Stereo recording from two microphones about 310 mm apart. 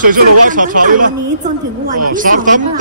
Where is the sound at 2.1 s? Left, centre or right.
Right.